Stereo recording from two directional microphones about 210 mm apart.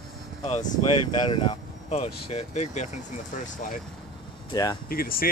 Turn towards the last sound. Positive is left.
turn(degrees=45)  # may be behind; listen again after turning